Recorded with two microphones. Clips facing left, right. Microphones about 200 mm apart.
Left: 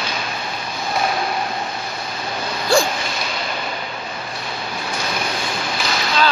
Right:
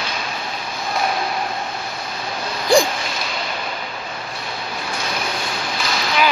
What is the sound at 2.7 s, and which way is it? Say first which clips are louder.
Owl: right 2 dB; 15° right (ahead or behind).